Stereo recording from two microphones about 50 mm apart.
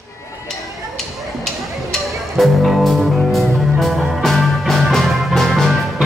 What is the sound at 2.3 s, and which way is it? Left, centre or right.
Music, centre.